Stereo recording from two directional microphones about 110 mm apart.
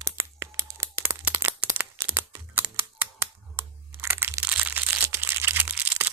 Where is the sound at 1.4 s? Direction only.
25° right (ahead or behind).